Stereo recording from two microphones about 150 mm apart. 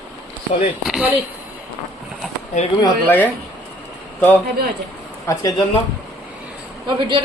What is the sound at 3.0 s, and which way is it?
A man's voice, 10° left (ahead or behind).